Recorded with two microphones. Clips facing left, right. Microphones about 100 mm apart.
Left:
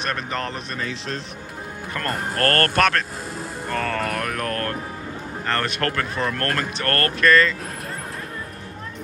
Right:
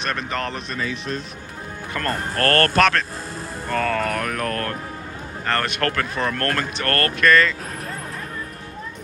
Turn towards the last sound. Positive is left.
turn(degrees=35)  # may be behind; listen again after turning